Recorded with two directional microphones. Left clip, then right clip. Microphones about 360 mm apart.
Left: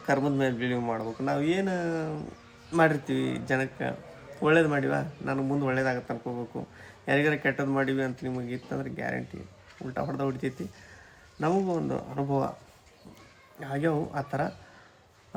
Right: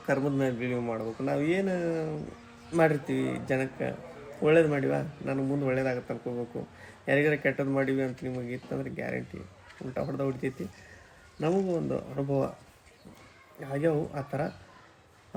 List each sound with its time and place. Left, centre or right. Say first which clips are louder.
0.0 s speech: left 2 dB; centre
13.6 s speech: even; centre